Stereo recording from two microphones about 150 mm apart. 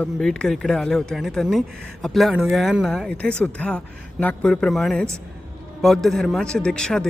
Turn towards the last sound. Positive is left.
turn(degrees=5)  # may be behind; listen again after turning